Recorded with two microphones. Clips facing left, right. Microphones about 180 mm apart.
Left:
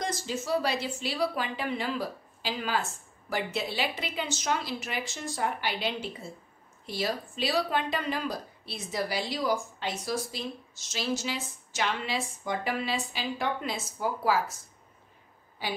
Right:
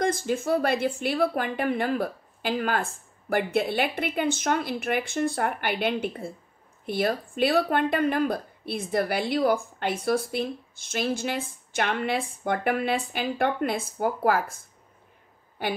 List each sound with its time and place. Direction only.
0.0 s a woman's voice: 55° right (ahead or behind)